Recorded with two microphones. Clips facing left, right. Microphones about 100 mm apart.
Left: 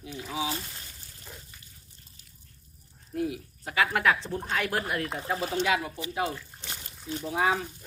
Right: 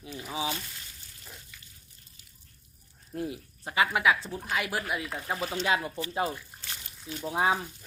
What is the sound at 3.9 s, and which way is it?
Speech, 5° right (ahead or behind).